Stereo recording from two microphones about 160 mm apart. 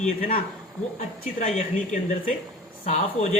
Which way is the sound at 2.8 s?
45° left (ahead or behind).